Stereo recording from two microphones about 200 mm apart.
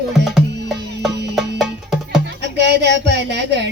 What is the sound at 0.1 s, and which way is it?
Music, centre (ahead or behind).